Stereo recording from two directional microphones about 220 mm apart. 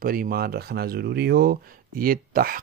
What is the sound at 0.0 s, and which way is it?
Speech, 40° right (ahead or behind).